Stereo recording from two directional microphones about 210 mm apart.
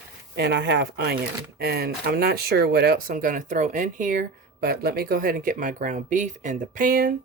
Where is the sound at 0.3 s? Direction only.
50° right (ahead or behind).